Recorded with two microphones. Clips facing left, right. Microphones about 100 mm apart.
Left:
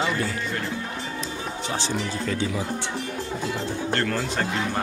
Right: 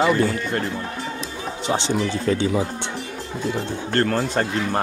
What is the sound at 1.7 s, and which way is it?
Speech, 20° right (ahead or behind).